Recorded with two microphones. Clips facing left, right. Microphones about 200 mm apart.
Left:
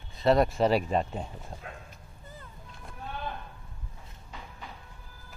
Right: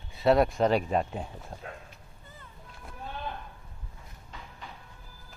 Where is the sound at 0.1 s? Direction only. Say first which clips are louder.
Right 1 dB; 5° right (ahead or behind).